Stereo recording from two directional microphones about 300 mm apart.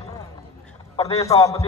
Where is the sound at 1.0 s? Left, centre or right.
Centre.